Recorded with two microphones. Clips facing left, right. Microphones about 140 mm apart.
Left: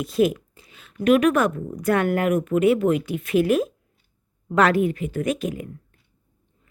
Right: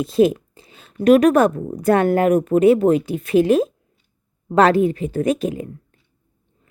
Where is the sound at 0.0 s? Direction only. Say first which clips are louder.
Right 5 dB; 30° right (ahead or behind).